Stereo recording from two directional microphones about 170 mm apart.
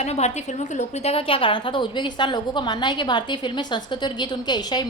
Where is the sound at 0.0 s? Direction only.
40° left (ahead or behind).